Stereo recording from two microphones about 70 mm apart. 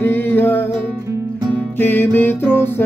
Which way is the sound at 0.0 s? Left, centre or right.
Left.